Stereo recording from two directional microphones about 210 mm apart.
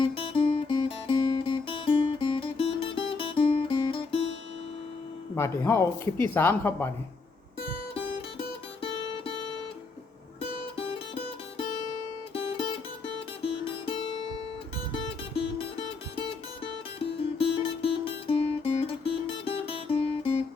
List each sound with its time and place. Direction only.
0.0 s music: 25° left (ahead or behind)
5.3 s speech: 10° left (ahead or behind)
10.8 s music: 25° left (ahead or behind)
15.4 s music: 25° left (ahead or behind)
17.0 s music: 25° left (ahead or behind)